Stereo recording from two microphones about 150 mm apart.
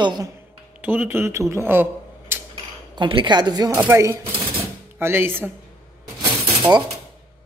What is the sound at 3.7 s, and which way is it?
Speech, 15° right (ahead or behind).